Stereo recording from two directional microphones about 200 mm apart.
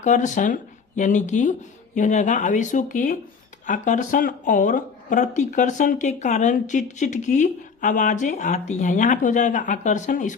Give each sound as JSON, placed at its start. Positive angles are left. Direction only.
{"t": 0.0, "sound": "speech", "side_deg": 40}